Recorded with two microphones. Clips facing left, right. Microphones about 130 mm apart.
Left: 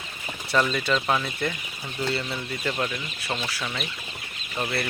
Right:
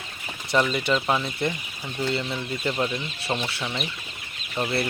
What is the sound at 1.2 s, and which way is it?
Speech, 20° right (ahead or behind).